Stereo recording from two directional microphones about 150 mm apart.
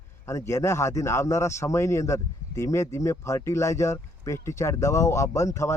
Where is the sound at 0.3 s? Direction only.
20° left (ahead or behind).